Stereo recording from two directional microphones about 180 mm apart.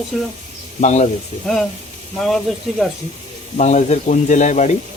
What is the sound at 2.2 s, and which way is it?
Speech, centre (ahead or behind).